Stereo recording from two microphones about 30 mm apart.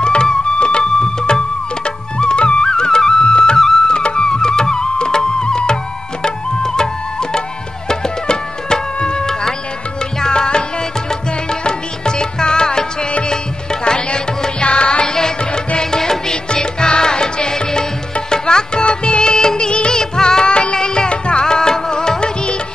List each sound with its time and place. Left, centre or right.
0.0 s music: left
3.5 s music: centre
3.8 s music: left
10.2 s tabla: left
11.6 s music: left
13.8 s music: left
15.1 s music: centre
19.3 s music of bollywood: left
19.9 s music: left